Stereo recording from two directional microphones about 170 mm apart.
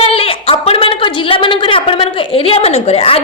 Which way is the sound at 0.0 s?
35° left (ahead or behind).